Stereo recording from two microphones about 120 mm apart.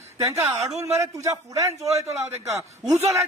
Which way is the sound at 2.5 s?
25° right (ahead or behind).